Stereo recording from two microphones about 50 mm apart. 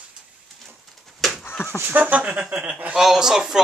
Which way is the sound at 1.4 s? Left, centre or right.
Left.